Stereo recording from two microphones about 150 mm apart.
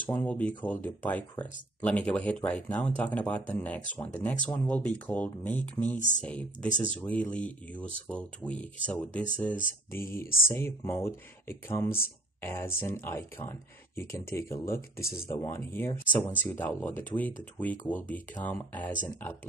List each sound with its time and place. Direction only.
0.0 s speech: 10° left (ahead or behind)